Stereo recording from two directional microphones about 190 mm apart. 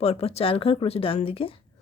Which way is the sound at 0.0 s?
30° left (ahead or behind).